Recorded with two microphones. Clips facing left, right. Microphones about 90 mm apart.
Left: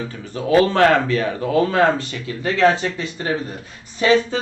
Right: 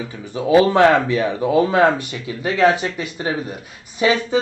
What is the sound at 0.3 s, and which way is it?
Speech, 15° right (ahead or behind).